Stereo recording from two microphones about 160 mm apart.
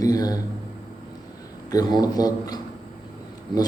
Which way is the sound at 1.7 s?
25° left (ahead or behind).